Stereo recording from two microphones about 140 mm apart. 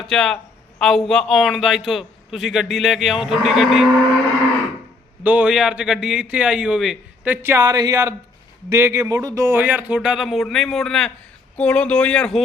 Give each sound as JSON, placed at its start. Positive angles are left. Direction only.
{"t": 0.1, "sound": "a man's voice", "side_deg": 5}
{"t": 5.2, "sound": "a man's voice", "side_deg": -10}
{"t": 7.3, "sound": "speech", "side_deg": -15}